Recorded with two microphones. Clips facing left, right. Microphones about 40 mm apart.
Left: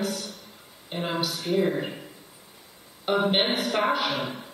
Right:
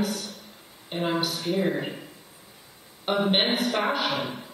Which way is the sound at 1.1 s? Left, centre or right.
Right.